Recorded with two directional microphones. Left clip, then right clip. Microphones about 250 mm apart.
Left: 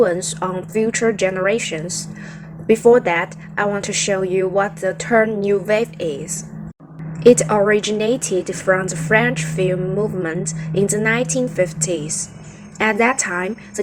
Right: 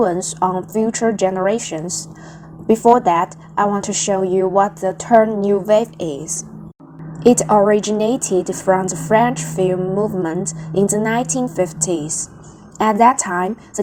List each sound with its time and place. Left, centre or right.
0.0 s a woman's voice: right